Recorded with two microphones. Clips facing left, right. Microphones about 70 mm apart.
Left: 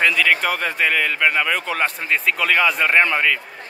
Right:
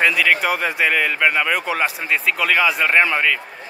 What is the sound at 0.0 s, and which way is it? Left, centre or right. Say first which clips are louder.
Speech: right 1 dB; centre.